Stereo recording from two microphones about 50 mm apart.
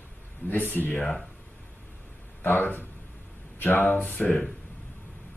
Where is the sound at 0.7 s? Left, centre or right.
Left.